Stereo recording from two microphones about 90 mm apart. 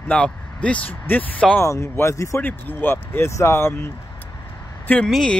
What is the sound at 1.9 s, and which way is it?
Speech, 35° left (ahead or behind).